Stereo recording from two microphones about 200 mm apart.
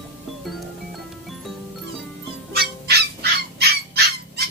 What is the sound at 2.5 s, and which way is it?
Music, 55° right (ahead or behind).